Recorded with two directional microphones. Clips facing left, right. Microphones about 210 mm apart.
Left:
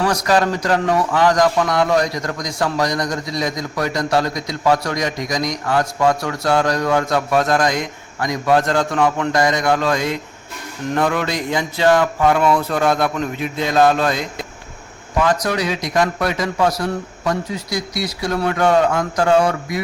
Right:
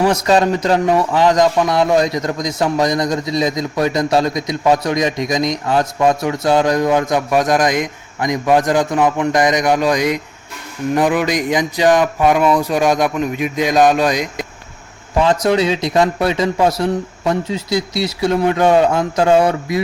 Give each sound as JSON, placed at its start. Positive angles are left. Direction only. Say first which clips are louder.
{"t": 0.0, "sound": "a man's voice", "louder": "right 3 dB", "side_deg": -25}